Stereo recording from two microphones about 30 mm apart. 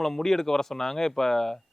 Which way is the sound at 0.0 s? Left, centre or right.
Centre.